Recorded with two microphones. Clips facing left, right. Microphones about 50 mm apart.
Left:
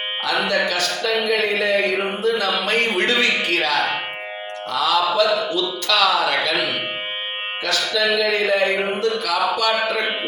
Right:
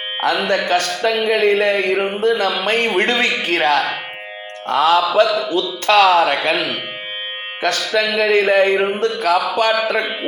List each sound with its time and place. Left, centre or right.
0.4 s music: right
2.9 s a man's voice: right
4.7 s music: right
7.6 s music: right